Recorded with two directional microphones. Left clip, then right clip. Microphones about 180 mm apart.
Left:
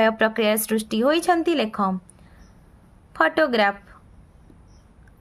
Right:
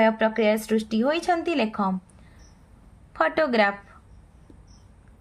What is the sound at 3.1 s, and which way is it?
Speech, 25° left (ahead or behind).